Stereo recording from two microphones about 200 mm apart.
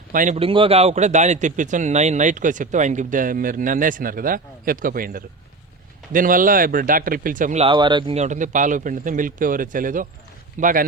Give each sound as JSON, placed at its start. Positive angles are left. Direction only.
{"t": 0.1, "sound": "speech", "side_deg": -40}
{"t": 0.3, "sound": "a man's voice", "side_deg": -25}
{"t": 7.7, "sound": "a man's voice", "side_deg": -25}